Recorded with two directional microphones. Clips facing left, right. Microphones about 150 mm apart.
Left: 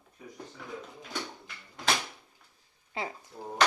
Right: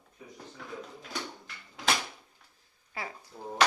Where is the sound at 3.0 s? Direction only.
25° left (ahead or behind).